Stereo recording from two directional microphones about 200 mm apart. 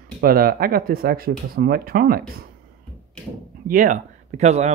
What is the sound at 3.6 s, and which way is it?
Speech, 40° right (ahead or behind).